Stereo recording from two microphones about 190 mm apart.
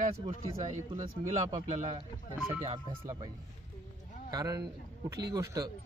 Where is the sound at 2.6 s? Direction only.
35° right (ahead or behind).